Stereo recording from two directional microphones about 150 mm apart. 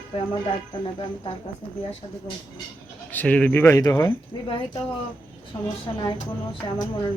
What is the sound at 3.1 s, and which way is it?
Speech, 10° left (ahead or behind).